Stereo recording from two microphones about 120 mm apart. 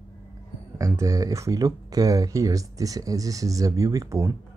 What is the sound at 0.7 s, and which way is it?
Speech, 25° right (ahead or behind).